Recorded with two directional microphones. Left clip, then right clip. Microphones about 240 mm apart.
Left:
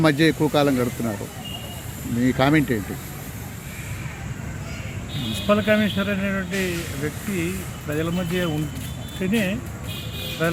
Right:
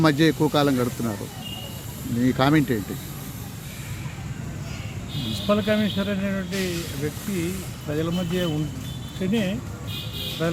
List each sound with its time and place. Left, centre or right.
0.0 s speech: centre
2.2 s speech: centre
5.5 s speech: centre